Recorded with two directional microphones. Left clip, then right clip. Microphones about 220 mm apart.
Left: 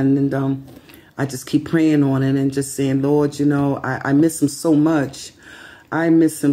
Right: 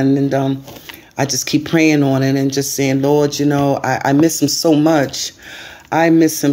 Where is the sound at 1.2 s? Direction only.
15° left (ahead or behind).